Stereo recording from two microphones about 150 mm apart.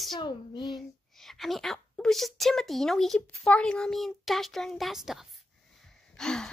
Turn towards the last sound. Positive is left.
turn(degrees=5)  # may be behind; listen again after turning